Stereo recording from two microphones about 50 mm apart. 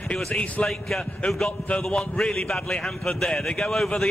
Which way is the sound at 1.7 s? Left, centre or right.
Centre.